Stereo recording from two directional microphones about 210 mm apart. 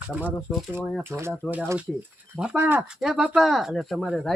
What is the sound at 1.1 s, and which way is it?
Speech, 10° right (ahead or behind).